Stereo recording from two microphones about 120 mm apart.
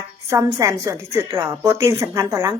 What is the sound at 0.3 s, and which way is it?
A woman's voice, 25° right (ahead or behind).